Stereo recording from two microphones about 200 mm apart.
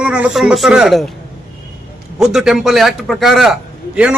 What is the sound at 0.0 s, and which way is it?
A man's voice, 5° right (ahead or behind).